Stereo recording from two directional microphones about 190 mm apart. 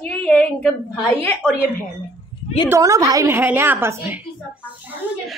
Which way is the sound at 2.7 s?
15° right (ahead or behind).